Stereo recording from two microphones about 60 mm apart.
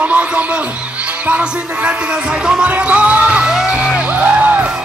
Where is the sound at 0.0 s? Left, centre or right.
Right.